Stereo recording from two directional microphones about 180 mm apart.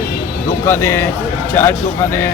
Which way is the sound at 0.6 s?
15° left (ahead or behind).